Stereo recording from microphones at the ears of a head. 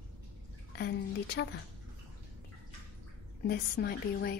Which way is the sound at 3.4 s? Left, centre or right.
Left.